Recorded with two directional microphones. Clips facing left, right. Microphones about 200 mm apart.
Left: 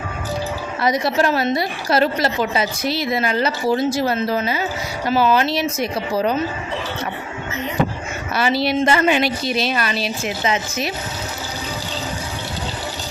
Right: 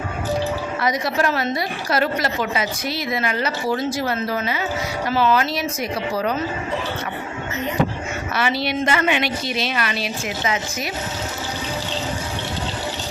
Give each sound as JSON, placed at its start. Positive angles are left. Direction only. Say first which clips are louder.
{"t": 0.8, "sound": "a woman's voice", "louder": "left 4 dB", "side_deg": 30}
{"t": 8.4, "sound": "a woman's voice", "louder": "left 4 dB", "side_deg": 35}